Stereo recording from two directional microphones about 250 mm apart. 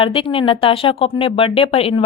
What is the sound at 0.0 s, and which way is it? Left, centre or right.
Speech, left.